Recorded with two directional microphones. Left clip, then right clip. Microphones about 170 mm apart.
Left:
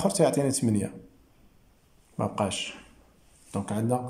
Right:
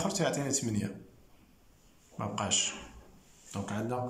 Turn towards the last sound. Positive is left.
turn(degrees=30)  # may be behind; listen again after turning